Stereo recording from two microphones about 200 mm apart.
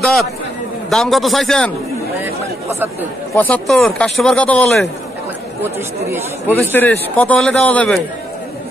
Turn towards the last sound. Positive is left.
turn(degrees=5)  # may be behind; listen again after turning